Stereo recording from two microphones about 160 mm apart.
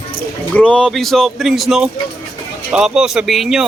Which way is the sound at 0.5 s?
5° left (ahead or behind).